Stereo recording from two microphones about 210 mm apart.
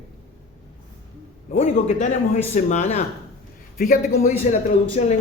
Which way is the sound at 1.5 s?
30° left (ahead or behind).